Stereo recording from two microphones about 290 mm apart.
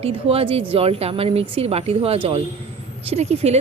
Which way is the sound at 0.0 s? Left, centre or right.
Centre.